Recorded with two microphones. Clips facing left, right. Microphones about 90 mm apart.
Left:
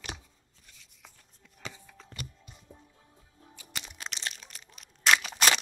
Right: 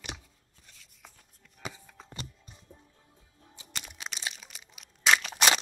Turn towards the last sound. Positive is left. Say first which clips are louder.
# even
turn(degrees=0)  # may be behind; listen again after turning